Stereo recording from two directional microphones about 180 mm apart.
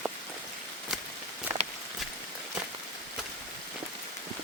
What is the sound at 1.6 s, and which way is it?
Walk, 35° right (ahead or behind).